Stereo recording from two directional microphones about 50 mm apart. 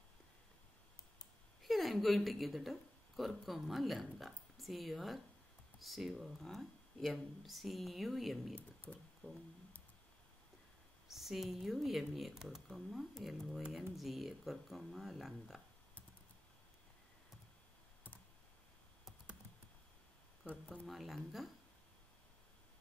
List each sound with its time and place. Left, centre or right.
1.6 s a woman's voice: centre
8.5 s speech: left
9.2 s a sound: left
11.1 s speech: centre
20.4 s speech: left
20.8 s speech: centre